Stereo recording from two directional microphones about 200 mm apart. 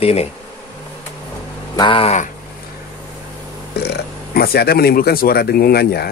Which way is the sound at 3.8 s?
50° left (ahead or behind).